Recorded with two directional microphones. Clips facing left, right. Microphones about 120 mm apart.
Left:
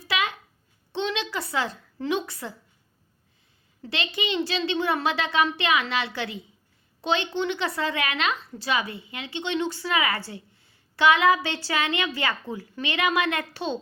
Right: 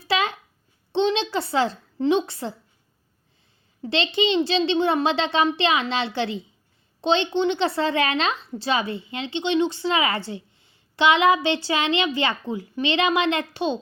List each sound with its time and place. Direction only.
0.0 s a sound: 30° right (ahead or behind)
0.9 s speech: 30° right (ahead or behind)
3.8 s a woman's voice: 30° right (ahead or behind)